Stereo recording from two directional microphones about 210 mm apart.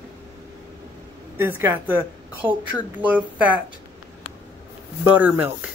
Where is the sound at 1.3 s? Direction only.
10° right (ahead or behind).